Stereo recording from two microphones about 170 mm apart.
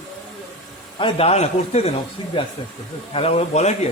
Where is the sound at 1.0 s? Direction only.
30° left (ahead or behind).